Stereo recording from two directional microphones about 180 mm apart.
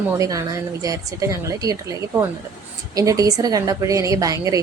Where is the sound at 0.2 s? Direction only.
20° right (ahead or behind).